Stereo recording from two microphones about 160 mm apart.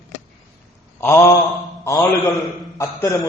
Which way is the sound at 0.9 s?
15° left (ahead or behind).